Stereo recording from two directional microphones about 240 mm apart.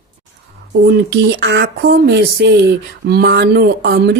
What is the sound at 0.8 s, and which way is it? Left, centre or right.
Speech, right.